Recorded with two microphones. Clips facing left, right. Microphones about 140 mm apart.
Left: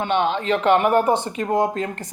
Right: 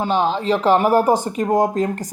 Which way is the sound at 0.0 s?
35° right (ahead or behind).